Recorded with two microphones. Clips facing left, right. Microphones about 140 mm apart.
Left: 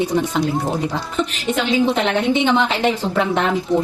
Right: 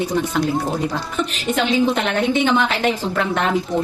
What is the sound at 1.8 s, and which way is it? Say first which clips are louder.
A woman's voice: left 1 dB; 25° left (ahead or behind).